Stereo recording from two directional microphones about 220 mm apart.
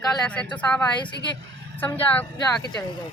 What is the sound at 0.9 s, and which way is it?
Speech, 20° left (ahead or behind).